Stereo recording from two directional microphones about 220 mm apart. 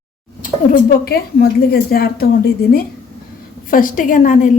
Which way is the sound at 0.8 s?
45° left (ahead or behind).